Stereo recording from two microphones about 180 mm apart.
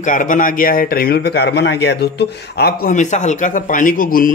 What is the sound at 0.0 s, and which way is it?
A man's voice, 45° left (ahead or behind).